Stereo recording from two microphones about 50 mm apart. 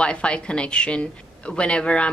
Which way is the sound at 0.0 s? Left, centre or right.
Left.